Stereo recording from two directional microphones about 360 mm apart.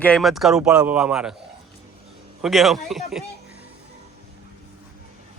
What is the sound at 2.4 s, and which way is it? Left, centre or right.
Speech, centre.